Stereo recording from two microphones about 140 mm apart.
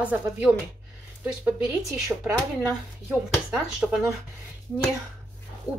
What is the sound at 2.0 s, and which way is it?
Speech, 15° right (ahead or behind).